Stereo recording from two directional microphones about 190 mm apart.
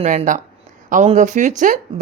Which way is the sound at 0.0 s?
40° right (ahead or behind).